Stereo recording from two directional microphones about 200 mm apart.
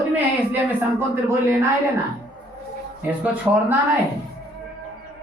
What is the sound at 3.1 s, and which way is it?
Speech, 10° right (ahead or behind).